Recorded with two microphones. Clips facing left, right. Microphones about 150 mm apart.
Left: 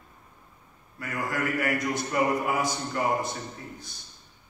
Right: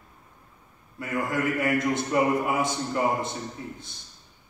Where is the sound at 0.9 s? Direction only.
25° right (ahead or behind).